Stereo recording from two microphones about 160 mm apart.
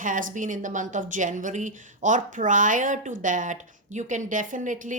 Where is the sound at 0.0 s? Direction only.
55° right (ahead or behind).